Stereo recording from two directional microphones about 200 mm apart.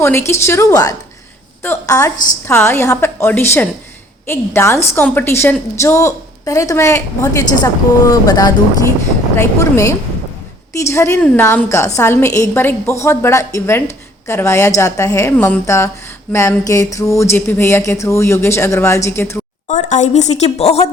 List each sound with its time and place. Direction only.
0.0 s a woman's voice: 10° left (ahead or behind)
19.6 s a woman's voice: 35° left (ahead or behind)